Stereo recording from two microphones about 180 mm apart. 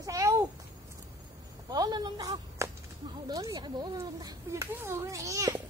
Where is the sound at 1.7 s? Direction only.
20° right (ahead or behind).